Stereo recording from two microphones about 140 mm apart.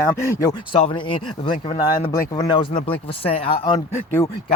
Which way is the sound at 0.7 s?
35° left (ahead or behind).